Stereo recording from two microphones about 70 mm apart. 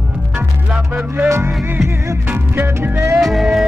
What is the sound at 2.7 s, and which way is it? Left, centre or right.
Music, right.